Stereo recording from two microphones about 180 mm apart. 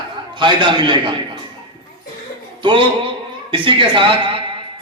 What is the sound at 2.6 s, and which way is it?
A man's voice, 25° right (ahead or behind).